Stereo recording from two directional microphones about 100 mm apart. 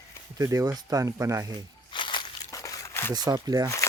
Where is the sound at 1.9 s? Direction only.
55° left (ahead or behind).